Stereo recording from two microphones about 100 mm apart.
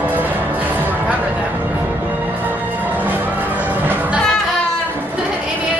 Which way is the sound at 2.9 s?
20° right (ahead or behind).